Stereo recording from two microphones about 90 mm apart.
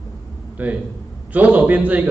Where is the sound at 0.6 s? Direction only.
20° right (ahead or behind).